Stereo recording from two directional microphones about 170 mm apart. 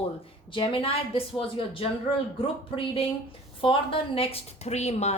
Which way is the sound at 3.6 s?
30° left (ahead or behind).